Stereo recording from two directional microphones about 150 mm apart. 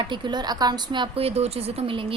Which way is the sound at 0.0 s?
30° right (ahead or behind).